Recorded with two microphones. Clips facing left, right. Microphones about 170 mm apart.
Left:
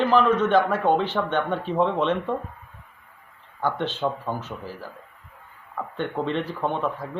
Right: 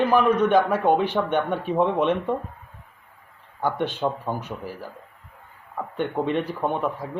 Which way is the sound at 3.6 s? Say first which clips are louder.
Right 1 dB; 15° right (ahead or behind).